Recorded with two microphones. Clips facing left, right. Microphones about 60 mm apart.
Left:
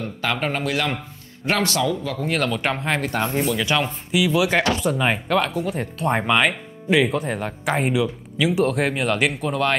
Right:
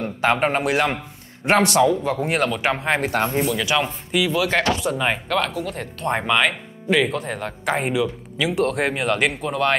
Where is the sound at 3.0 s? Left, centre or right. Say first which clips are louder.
Right 2 dB; right.